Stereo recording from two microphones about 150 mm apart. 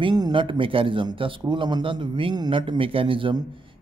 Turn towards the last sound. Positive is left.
turn(degrees=-35)  # may be behind; listen again after turning